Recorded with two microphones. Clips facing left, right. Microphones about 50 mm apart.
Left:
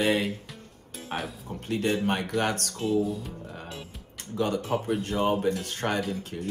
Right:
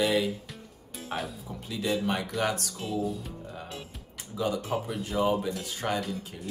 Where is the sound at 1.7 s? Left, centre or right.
Left.